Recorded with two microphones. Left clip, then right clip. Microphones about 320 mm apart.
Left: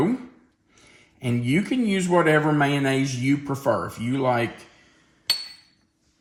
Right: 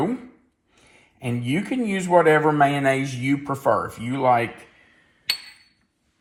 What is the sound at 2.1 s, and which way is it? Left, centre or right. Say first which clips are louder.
Speech: right 4 dB; centre.